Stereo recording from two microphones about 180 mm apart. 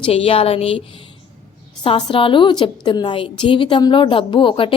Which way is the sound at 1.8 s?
30° left (ahead or behind).